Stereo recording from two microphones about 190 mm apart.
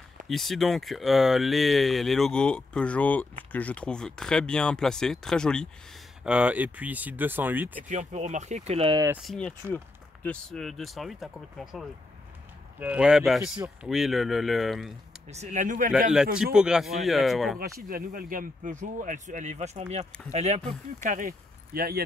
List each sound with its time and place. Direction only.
0.3 s speech: centre (ahead or behind)
7.9 s speech: 35° right (ahead or behind)
9.2 s speech: centre (ahead or behind)
15.2 s speech: 35° right (ahead or behind)
16.1 s speech: 5° right (ahead or behind)
17.8 s speech: 45° right (ahead or behind)